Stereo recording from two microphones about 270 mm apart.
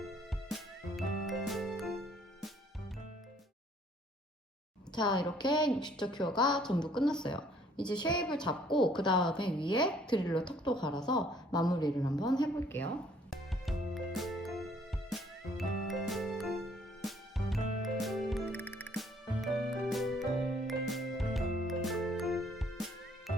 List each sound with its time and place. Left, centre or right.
0.0 s music: centre
4.9 s a woman's voice: centre
6.6 s a woman's voice: centre
6.8 s a woman's voice: centre
8.6 s a woman's voice: centre
9.0 s a woman's voice: centre
13.3 s music: centre